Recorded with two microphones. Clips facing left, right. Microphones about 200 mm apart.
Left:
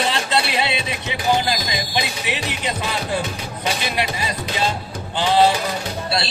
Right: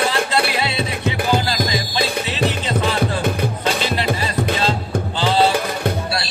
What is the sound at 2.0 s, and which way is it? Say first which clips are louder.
Music: right 5 dB; 55° right (ahead or behind).